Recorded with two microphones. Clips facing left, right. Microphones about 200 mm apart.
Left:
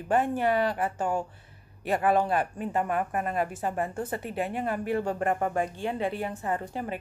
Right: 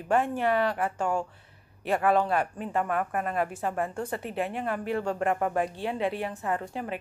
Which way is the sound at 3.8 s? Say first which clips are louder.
Even; 20° left (ahead or behind).